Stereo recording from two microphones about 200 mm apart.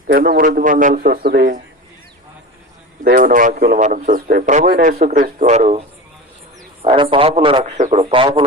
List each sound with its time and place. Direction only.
0.1 s a man's voice: 45° right (ahead or behind)
3.0 s a man's voice: 45° right (ahead or behind); by 8.5 s 25° right (ahead or behind)